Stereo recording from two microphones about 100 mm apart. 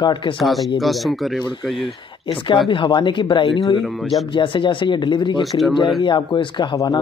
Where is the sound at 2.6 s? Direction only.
50° left (ahead or behind).